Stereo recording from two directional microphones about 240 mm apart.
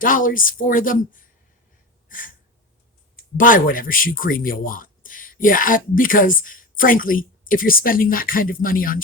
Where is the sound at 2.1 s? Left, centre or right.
Left.